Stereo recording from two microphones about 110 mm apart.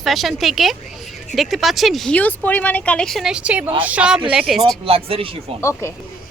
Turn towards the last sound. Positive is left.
turn(degrees=25)  # may be behind; listen again after turning